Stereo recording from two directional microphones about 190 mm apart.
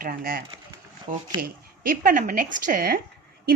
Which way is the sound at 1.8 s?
45° right (ahead or behind).